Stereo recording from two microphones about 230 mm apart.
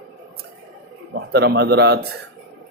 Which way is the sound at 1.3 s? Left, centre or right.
Right.